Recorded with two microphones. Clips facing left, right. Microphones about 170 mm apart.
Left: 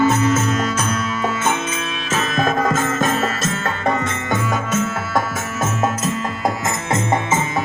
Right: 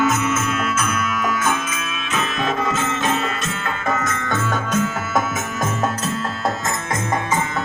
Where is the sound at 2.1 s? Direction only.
40° left (ahead or behind).